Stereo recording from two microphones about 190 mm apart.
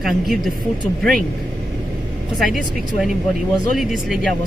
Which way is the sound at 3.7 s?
Centre (ahead or behind).